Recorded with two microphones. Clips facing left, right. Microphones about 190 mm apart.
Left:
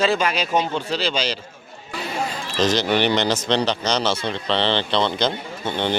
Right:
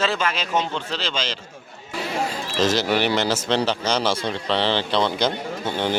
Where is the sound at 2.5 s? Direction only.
5° right (ahead or behind).